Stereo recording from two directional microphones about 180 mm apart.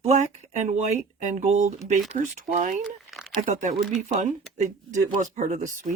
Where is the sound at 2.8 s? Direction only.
Centre (ahead or behind).